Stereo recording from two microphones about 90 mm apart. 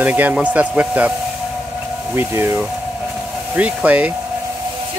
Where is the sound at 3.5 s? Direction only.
15° right (ahead or behind).